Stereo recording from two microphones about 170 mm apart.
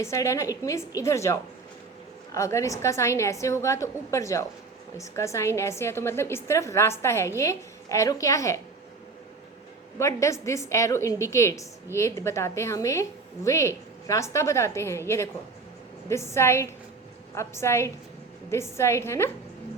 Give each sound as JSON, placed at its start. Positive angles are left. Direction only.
{"t": 0.0, "sound": "a woman's voice", "side_deg": 15}
{"t": 10.0, "sound": "a woman's voice", "side_deg": 15}